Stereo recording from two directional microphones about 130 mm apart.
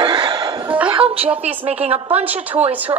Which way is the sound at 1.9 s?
50° right (ahead or behind).